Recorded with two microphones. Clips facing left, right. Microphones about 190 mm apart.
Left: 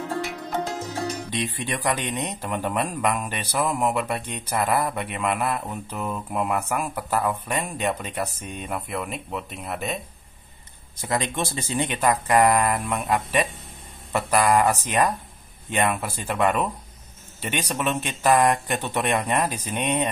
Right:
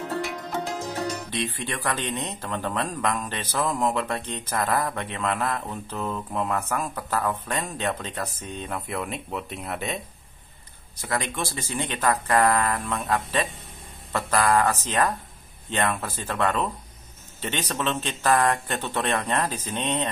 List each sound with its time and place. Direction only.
1.3 s a man's voice: 15° left (ahead or behind); by 9.9 s centre (ahead or behind)
11.0 s a man's voice: 20° left (ahead or behind)